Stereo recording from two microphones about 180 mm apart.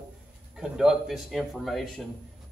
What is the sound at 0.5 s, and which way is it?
A man's voice, 5° right (ahead or behind).